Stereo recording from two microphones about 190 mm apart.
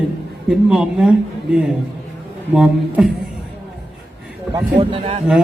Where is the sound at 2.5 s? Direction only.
5° right (ahead or behind).